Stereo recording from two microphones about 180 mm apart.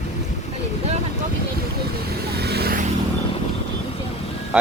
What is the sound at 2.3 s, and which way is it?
Vehicle, 65° right (ahead or behind).